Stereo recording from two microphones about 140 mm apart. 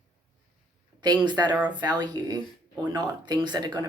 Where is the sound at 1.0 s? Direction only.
30° right (ahead or behind).